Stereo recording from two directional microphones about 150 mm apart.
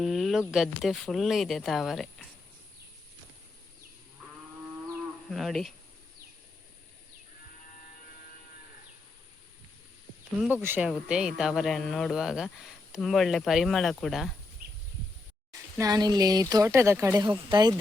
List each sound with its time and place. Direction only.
0.0 s speech: centre (ahead or behind)
5.3 s speech: centre (ahead or behind)
10.5 s speech: 15° right (ahead or behind)
15.8 s speech: 25° right (ahead or behind)
17.2 s speech: 30° right (ahead or behind)